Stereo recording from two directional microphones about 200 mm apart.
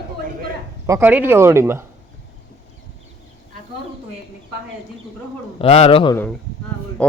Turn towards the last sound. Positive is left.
turn(degrees=25)  # may be behind; listen again after turning